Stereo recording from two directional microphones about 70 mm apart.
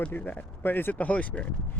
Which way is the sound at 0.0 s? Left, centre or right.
Left.